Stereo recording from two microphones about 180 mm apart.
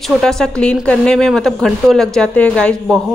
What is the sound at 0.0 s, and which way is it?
A woman's voice, centre (ahead or behind).